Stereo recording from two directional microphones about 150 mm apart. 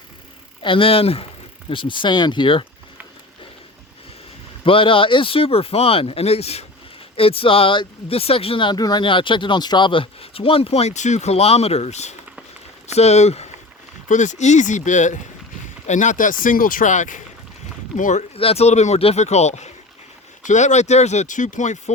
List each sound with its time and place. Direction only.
0.6 s speech: 35° left (ahead or behind)
4.6 s speech: 35° left (ahead or behind); by 18.3 s 55° left (ahead or behind)
18.3 s speech: 40° left (ahead or behind)